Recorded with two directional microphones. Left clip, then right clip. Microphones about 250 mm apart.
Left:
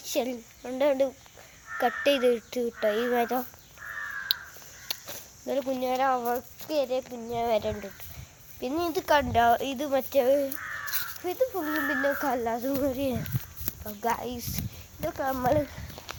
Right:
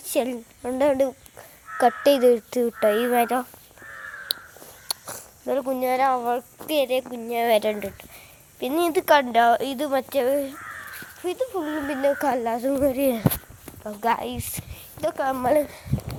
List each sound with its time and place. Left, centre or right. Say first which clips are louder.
0.0 s a woman's voice: right 5 dB; right
4.3 s crow: right 1 dB; right
4.9 s speech: right 4 dB; right